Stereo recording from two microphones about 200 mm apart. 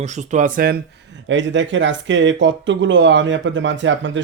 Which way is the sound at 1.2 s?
65° right (ahead or behind).